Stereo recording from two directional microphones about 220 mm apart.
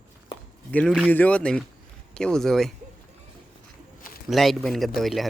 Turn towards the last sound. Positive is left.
turn(degrees=0)  # may be behind; listen again after turning